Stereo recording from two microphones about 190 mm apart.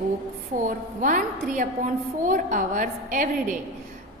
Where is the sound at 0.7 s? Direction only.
45° right (ahead or behind).